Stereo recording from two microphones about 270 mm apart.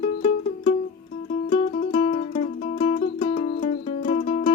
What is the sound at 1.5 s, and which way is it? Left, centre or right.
Music, left.